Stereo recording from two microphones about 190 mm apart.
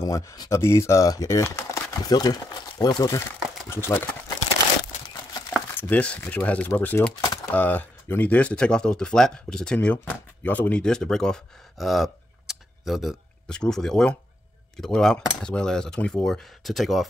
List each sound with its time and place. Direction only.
0.0 s speech: 15° left (ahead or behind)
5.8 s speech: 5° left (ahead or behind)